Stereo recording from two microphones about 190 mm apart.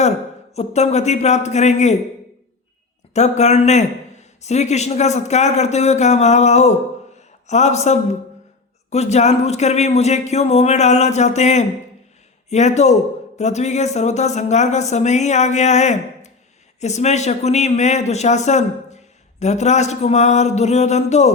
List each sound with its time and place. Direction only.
0.5 s speech: 35° left (ahead or behind)
3.1 s speech: 35° left (ahead or behind)